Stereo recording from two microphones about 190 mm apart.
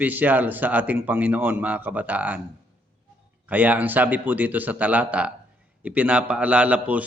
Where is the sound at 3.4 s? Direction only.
10° right (ahead or behind).